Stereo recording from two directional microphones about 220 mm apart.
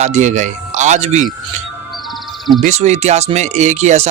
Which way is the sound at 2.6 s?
30° right (ahead or behind).